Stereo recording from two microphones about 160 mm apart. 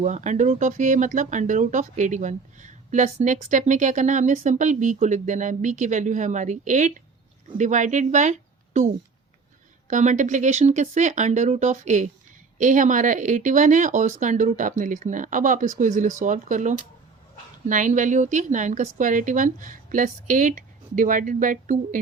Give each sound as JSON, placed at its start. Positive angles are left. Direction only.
{"t": 0.0, "sound": "speech", "side_deg": -50}
{"t": 9.9, "sound": "speech", "side_deg": -50}